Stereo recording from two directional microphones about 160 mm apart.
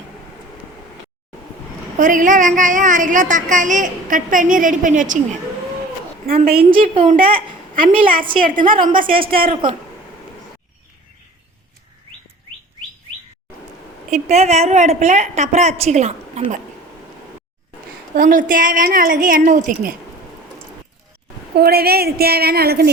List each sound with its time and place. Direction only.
2.0 s a woman's voice: 55° right (ahead or behind)
6.2 s a woman's voice: 65° right (ahead or behind)
9.1 s speech: 35° right (ahead or behind)
14.1 s a woman's voice: 45° right (ahead or behind)
18.1 s a woman's voice: 60° right (ahead or behind)
21.5 s a woman's voice: 75° right (ahead or behind)